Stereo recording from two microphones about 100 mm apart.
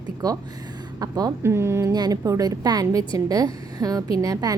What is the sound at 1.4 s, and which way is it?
Speech, 25° right (ahead or behind).